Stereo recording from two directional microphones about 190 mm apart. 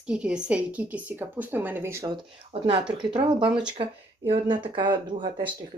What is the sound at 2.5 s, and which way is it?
Speech, 30° right (ahead or behind).